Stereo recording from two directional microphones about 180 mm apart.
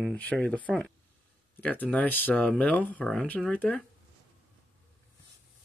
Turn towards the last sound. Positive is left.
turn(degrees=10)  # may be behind; listen again after turning